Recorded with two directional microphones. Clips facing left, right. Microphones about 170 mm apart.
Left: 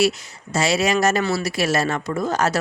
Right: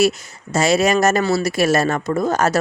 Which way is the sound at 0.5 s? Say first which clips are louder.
Right 4 dB; 45° right (ahead or behind).